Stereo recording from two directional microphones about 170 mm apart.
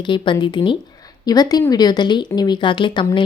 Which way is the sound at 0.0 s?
30° left (ahead or behind).